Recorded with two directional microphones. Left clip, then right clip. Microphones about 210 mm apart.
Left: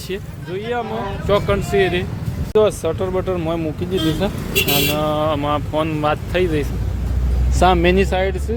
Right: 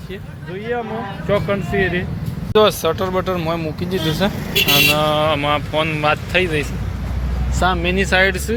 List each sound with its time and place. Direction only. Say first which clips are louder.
0.5 s speech: left 1 dB; 15° left (ahead or behind)
7.6 s speech: left 4 dB; 40° left (ahead or behind)
8.1 s speech: right 5 dB; 5° left (ahead or behind)